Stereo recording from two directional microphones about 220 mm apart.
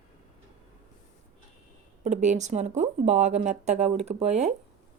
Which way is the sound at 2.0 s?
30° right (ahead or behind).